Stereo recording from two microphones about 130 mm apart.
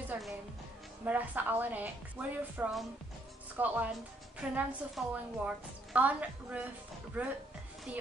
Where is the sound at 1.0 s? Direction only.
10° right (ahead or behind).